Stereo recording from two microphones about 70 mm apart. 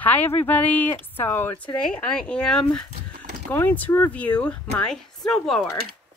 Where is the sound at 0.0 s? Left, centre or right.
Left.